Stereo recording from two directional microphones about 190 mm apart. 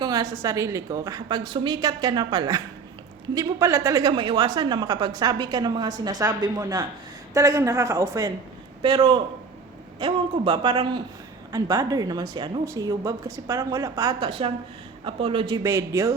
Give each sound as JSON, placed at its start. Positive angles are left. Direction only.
{"t": 0.0, "sound": "a woman's voice", "side_deg": -20}